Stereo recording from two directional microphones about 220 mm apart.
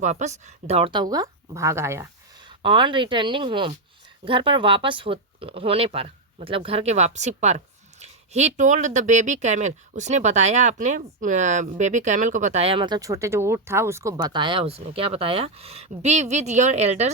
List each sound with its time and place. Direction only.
0.0 s speech: 30° right (ahead or behind)